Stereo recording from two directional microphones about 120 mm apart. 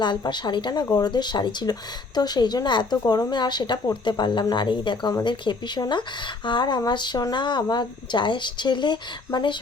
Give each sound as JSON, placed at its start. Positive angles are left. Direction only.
{"t": 0.0, "sound": "speech", "side_deg": 40}